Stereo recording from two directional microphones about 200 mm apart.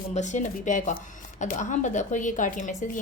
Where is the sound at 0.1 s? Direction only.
35° left (ahead or behind).